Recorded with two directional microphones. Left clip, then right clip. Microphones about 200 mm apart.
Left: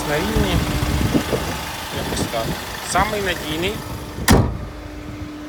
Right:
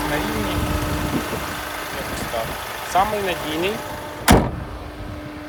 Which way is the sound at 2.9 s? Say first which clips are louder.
Even; 10° right (ahead or behind).